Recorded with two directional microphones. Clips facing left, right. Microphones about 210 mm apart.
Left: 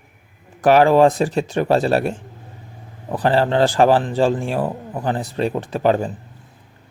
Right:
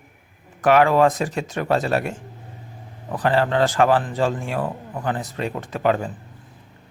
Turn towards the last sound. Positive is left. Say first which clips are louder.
# left 3 dB
turn(degrees=30)  # may be behind; listen again after turning